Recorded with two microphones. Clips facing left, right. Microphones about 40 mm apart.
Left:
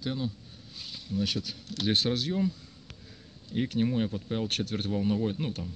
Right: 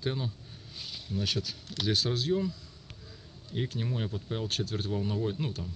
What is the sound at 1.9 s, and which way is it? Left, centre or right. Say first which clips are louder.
Speech: left 3 dB; left.